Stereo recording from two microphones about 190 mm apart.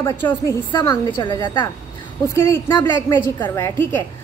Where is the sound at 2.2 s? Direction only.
15° left (ahead or behind).